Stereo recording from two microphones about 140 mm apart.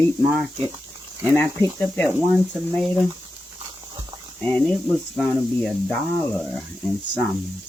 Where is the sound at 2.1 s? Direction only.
5° right (ahead or behind).